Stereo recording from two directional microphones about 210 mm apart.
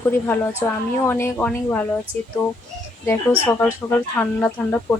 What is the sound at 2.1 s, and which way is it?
Speech, 25° right (ahead or behind).